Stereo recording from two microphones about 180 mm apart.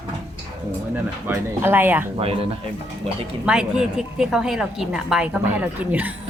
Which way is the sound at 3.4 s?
5° right (ahead or behind).